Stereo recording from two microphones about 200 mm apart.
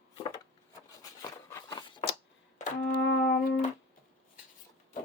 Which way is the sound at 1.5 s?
20° left (ahead or behind).